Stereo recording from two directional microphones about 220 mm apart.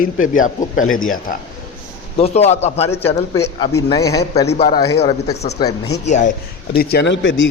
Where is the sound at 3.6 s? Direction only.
20° left (ahead or behind).